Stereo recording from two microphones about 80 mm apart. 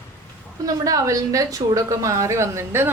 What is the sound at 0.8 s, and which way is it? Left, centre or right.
A woman's voice, right.